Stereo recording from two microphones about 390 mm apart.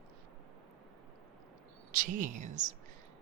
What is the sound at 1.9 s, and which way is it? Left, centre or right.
Speech, centre.